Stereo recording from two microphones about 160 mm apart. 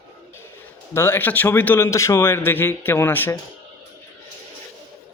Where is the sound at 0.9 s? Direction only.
15° left (ahead or behind).